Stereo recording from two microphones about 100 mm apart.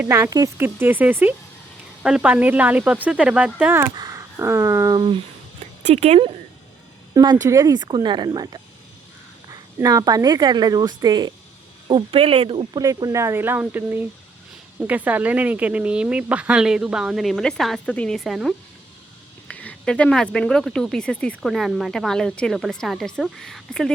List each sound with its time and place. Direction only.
0.3 s speech: 35° right (ahead or behind); by 3.8 s 15° right (ahead or behind)
3.9 s speech: 35° right (ahead or behind)
4.9 s speech: 55° right (ahead or behind)
5.9 s speech: 90° right
7.1 s a woman's voice: 40° right (ahead or behind)
11.9 s speech: 70° right (ahead or behind)
12.7 s speech: 40° right (ahead or behind); by 18.2 s 10° left (ahead or behind)
18.2 s speech: centre (ahead or behind)
19.5 s speech: 15° left (ahead or behind)